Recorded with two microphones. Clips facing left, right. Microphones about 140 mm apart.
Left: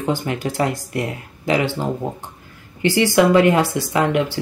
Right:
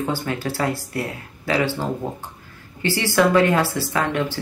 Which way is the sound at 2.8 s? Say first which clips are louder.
Left 4 dB; 15° left (ahead or behind).